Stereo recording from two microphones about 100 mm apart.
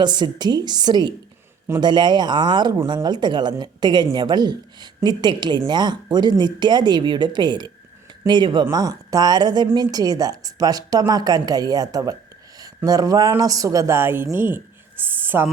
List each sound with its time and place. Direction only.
0.0 s speech: 45° right (ahead or behind)
8.7 s a woman's voice: 35° right (ahead or behind); by 15.4 s 20° right (ahead or behind)